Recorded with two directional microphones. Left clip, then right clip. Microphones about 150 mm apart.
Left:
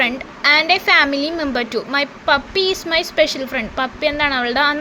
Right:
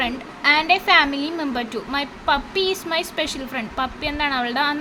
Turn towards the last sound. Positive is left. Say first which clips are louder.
# left 5 dB
turn(degrees=30)  # may be behind; listen again after turning